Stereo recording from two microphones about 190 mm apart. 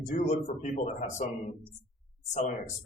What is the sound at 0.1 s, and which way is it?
Speech, 40° left (ahead or behind).